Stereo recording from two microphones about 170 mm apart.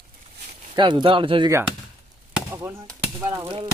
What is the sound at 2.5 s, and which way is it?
Speech, 20° right (ahead or behind).